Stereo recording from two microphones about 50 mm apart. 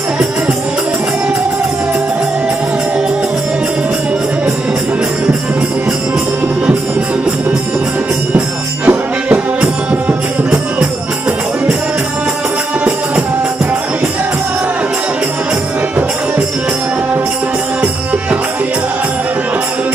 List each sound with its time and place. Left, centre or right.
8.8 s music: right